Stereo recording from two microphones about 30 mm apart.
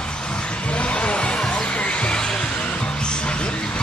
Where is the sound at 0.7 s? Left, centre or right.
Left.